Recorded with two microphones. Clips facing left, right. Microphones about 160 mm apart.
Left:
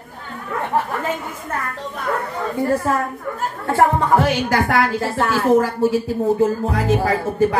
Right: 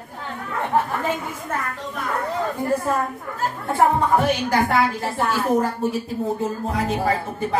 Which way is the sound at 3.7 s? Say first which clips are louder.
Left 2 dB; 90° left.